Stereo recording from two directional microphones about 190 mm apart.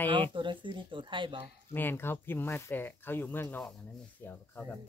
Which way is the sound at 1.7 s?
10° left (ahead or behind).